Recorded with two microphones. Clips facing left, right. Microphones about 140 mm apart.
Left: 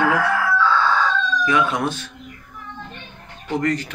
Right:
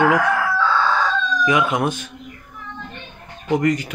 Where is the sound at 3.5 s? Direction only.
10° right (ahead or behind).